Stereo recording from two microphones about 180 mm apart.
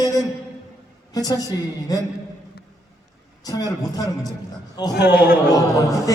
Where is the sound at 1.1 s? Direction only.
20° left (ahead or behind).